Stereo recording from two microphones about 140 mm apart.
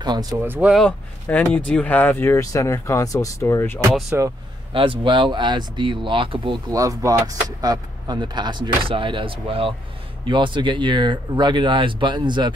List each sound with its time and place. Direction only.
0.0 s speech: 30° right (ahead or behind)
0.4 s speech: 10° right (ahead or behind)
1.2 s speech: 10° left (ahead or behind)
4.1 s speech: 15° right (ahead or behind)
4.7 s speech: 35° right (ahead or behind)
6.7 s speech: 25° right (ahead or behind)